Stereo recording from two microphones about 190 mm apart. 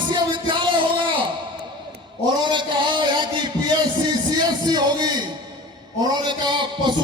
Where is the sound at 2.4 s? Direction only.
25° right (ahead or behind).